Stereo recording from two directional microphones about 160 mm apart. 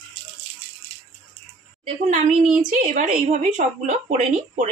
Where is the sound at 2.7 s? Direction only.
50° right (ahead or behind).